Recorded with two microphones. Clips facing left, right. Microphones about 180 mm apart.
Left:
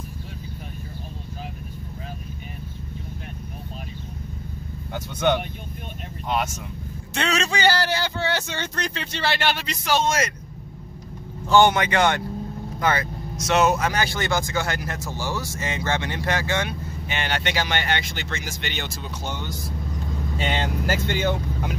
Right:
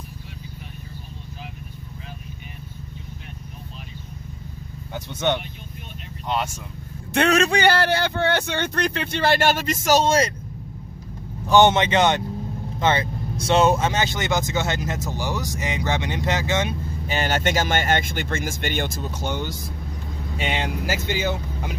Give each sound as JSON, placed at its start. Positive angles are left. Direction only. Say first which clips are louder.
{"t": 7.2, "sound": "speech", "louder": "right 6 dB", "side_deg": -55}
{"t": 11.4, "sound": "speech", "louder": "right 1 dB", "side_deg": -20}
{"t": 17.1, "sound": "speech", "louder": "right 4 dB", "side_deg": -40}
{"t": 20.3, "sound": "speech", "louder": "even", "side_deg": -10}